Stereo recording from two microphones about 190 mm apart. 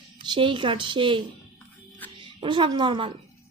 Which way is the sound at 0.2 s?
25° right (ahead or behind).